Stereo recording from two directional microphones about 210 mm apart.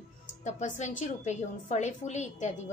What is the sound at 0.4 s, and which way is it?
Speech, 35° left (ahead or behind).